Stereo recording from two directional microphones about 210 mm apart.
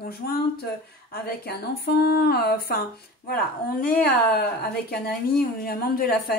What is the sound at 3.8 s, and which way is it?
Speech, 45° left (ahead or behind).